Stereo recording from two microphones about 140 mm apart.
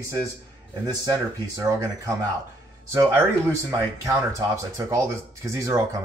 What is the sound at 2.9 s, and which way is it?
Speech, 20° right (ahead or behind).